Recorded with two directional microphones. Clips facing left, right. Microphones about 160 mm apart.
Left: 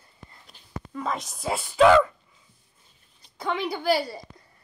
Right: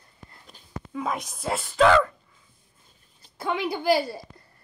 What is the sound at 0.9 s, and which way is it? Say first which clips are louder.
Speech: right 1 dB; 5° right (ahead or behind).